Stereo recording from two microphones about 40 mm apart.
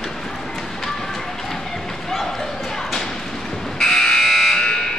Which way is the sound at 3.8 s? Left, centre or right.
Centre.